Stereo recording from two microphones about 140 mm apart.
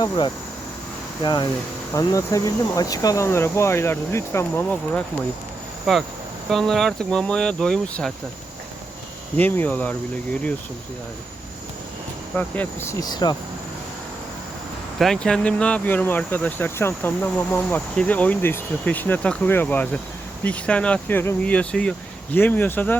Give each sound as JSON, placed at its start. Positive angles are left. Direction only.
{"t": 1.2, "sound": "speech", "side_deg": 30}
{"t": 5.8, "sound": "speech", "side_deg": 0}
{"t": 9.4, "sound": "speech", "side_deg": 10}
{"t": 12.4, "sound": "speech", "side_deg": 15}
{"t": 14.9, "sound": "speech", "side_deg": 0}